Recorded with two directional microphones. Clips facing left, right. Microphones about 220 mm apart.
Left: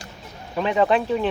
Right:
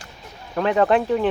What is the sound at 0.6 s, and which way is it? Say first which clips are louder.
Speech: right 2 dB; 15° left (ahead or behind).